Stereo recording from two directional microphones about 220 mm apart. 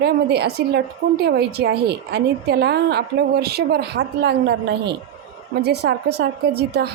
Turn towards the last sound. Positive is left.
turn(degrees=-45)  # may be behind; listen again after turning